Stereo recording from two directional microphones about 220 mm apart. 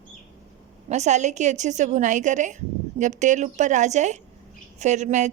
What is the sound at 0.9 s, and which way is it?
A woman's voice, 30° right (ahead or behind).